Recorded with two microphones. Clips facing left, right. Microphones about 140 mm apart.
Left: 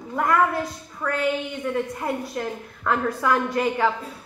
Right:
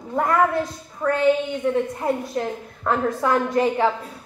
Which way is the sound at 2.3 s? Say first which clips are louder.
Right 3 dB; 25° right (ahead or behind).